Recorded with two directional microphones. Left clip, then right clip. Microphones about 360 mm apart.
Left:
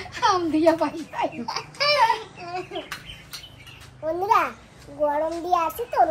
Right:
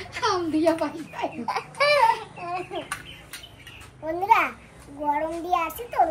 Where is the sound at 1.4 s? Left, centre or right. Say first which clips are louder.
Right 4 dB; centre.